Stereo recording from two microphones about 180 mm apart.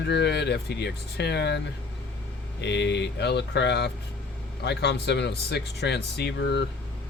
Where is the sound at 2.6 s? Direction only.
70° left (ahead or behind).